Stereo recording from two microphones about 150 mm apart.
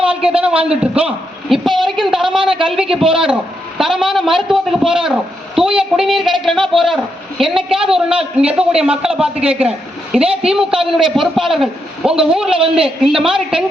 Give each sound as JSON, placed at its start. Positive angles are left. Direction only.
{"t": 0.0, "sound": "a man's voice", "side_deg": -5}
{"t": 2.2, "sound": "a woman's voice", "side_deg": -35}
{"t": 2.9, "sound": "a man's voice", "side_deg": -5}